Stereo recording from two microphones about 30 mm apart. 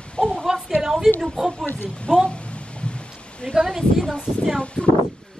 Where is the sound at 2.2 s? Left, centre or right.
Left.